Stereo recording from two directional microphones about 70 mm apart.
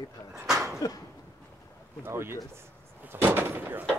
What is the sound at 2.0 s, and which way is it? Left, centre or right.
Speech, right.